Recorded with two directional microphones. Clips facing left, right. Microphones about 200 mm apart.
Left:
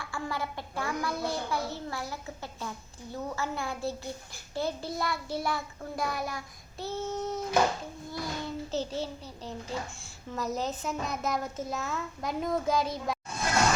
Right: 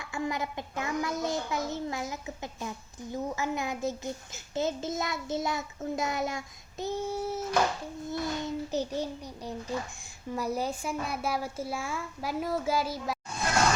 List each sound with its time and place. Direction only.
0.0 s a child's voice: 20° right (ahead or behind)
8.1 s a child's voice: 20° right (ahead or behind); by 13.1 s 5° right (ahead or behind)